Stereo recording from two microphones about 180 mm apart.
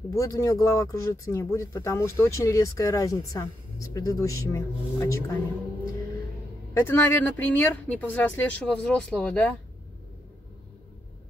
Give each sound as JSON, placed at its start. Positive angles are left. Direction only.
{"t": 0.1, "sound": "speech", "side_deg": 20}
{"t": 6.7, "sound": "speech", "side_deg": 10}